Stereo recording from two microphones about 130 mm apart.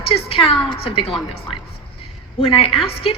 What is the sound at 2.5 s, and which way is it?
Speech, 45° left (ahead or behind).